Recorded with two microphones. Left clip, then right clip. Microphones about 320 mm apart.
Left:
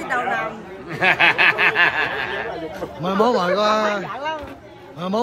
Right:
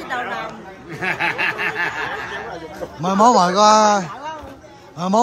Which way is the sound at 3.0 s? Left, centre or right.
Centre.